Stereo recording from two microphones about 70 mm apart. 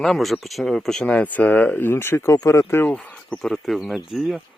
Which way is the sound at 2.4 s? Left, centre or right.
Left.